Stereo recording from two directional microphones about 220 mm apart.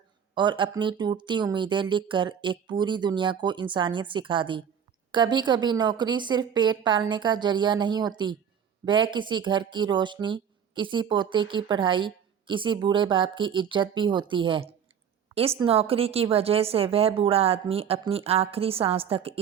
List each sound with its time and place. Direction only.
0.3 s speech: 20° right (ahead or behind)